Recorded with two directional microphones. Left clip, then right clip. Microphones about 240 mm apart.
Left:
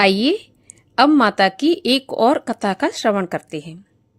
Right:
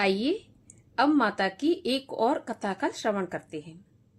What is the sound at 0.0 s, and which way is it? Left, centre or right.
A woman's voice, left.